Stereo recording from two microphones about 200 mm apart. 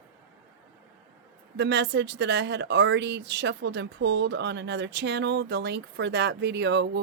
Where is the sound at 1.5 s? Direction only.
60° right (ahead or behind).